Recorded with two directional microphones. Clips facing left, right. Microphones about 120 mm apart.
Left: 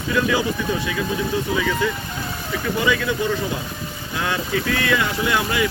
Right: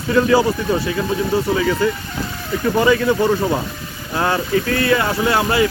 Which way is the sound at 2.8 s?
40° right (ahead or behind).